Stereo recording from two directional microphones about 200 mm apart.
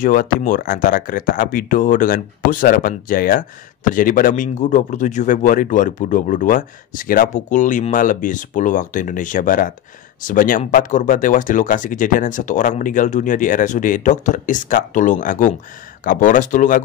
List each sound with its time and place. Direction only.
0.0 s speech: 40° left (ahead or behind)